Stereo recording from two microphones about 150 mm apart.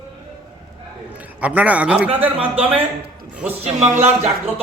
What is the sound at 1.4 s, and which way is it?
A man's voice, 10° right (ahead or behind).